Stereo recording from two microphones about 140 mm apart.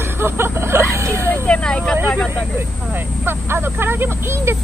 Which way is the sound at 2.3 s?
15° right (ahead or behind).